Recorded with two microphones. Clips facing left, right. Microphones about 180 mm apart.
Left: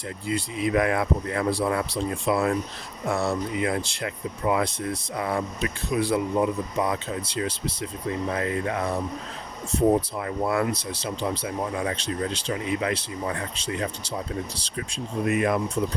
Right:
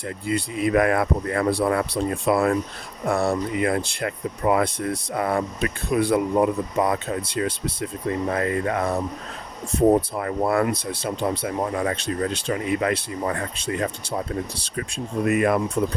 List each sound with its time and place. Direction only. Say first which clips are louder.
0.3 s speech: right 3 dB; 55° right (ahead or behind)